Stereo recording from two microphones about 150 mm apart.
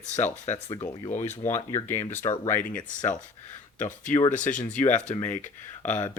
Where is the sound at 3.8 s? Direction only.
55° left (ahead or behind).